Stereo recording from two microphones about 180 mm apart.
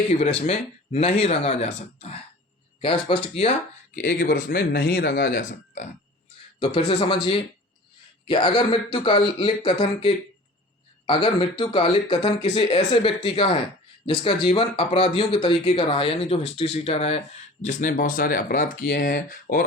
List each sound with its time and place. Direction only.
0.2 s speech: 35° left (ahead or behind)
3.9 s speech: 50° left (ahead or behind)
5.5 s speech: 45° left (ahead or behind)
6.7 s speech: 30° left (ahead or behind)
11.0 s speech: 25° left (ahead or behind); by 19.6 s 50° left (ahead or behind)